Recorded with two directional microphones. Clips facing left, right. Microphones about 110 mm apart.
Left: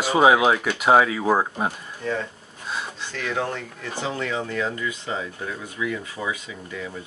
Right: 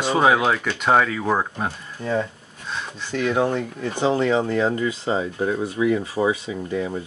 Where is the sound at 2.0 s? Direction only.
15° right (ahead or behind).